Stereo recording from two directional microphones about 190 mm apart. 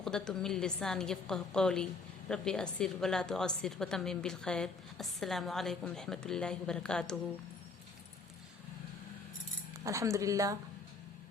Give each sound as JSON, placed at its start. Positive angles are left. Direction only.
{"t": 0.0, "sound": "a woman's voice", "side_deg": 5}
{"t": 9.8, "sound": "speech", "side_deg": -15}